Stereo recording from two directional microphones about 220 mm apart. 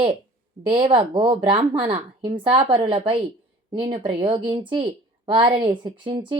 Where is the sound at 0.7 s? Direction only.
25° right (ahead or behind).